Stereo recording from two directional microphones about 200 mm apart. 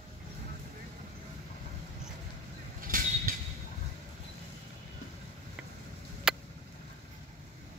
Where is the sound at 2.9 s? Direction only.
45° right (ahead or behind).